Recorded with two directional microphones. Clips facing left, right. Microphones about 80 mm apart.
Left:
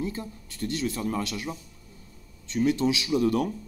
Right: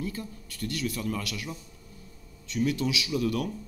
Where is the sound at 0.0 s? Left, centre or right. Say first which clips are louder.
Left 3 dB; left.